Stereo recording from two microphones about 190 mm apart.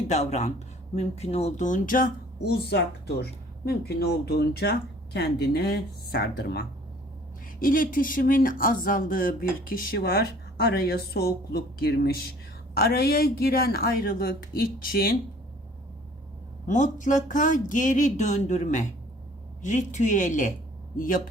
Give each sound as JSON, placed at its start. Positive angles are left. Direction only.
{"t": 0.1, "sound": "speech", "side_deg": 35}
{"t": 7.6, "sound": "speech", "side_deg": 45}
{"t": 16.6, "sound": "speech", "side_deg": 40}